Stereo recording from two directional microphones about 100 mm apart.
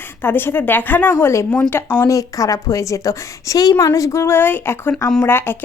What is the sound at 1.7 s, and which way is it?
Speech, 20° left (ahead or behind).